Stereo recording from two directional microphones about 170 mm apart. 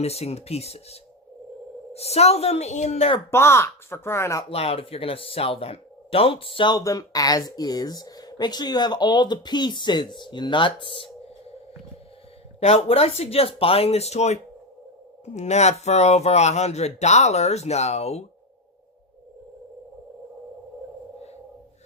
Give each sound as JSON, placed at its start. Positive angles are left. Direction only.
{"t": 0.0, "sound": "speech", "side_deg": 35}
{"t": 3.3, "sound": "speech", "side_deg": 15}
{"t": 4.4, "sound": "speech", "side_deg": 35}
{"t": 12.5, "sound": "speech", "side_deg": 35}